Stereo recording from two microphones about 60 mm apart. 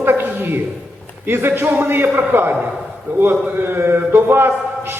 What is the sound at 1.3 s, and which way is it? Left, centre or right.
A man's voice, right.